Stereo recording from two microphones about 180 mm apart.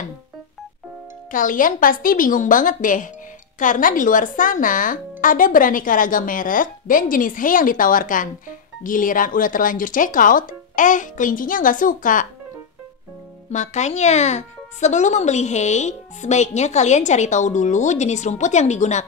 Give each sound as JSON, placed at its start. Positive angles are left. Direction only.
{"t": 1.3, "sound": "speech", "side_deg": 50}
{"t": 13.5, "sound": "speech", "side_deg": 40}